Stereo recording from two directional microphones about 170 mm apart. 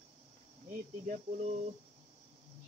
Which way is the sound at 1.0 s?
45° right (ahead or behind).